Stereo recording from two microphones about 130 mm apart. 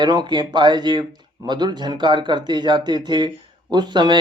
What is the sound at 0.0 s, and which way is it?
A man's voice, 30° right (ahead or behind).